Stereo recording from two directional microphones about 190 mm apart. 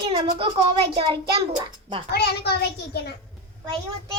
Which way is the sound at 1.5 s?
25° right (ahead or behind).